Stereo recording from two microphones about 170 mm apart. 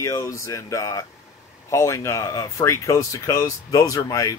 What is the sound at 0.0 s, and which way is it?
Speech, 15° left (ahead or behind).